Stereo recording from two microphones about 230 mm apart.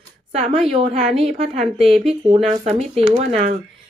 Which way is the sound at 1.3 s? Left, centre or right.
Right.